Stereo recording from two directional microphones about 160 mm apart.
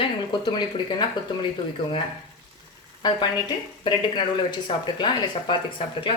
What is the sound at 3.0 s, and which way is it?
Speech, 25° left (ahead or behind).